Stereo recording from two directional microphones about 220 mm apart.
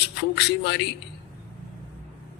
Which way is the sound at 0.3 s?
50° left (ahead or behind).